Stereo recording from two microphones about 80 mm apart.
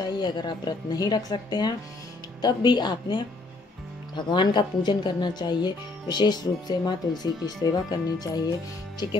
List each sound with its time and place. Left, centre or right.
0.0 s speech: left